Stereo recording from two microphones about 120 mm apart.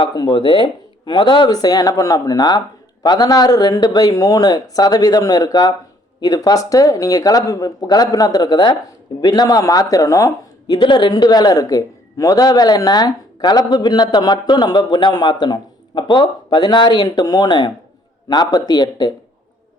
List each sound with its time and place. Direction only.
0.0 s a man's voice: 40° left (ahead or behind)
10.8 s a man's voice: 40° left (ahead or behind)